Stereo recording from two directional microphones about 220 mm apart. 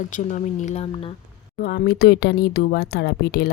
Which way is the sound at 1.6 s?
45° left (ahead or behind).